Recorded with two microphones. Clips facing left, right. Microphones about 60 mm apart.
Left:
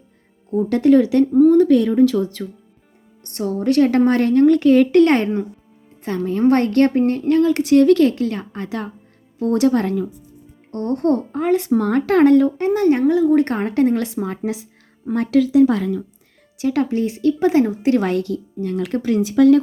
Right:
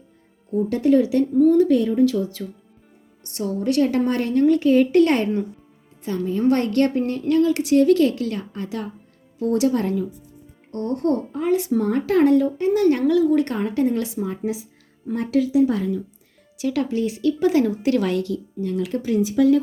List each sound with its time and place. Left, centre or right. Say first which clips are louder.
0.7 s a woman's voice: left 4 dB; left
1.6 s a woman's voice: left 4 dB; left
3.2 s a woman's voice: left 4 dB; left
10.7 s a woman's voice: left 3 dB; left
12.8 s a woman's voice: left 3 dB; left
16.6 s speech: left 3 dB; left